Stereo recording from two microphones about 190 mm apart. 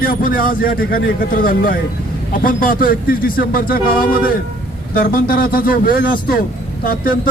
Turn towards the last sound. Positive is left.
turn(degrees=50)  # may be behind; listen again after turning